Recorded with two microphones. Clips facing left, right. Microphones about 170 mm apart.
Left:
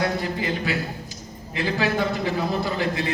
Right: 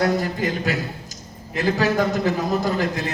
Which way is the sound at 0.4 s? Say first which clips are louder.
Right 2 dB; 40° right (ahead or behind).